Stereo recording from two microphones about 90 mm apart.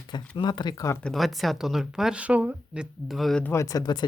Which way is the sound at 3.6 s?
50° left (ahead or behind).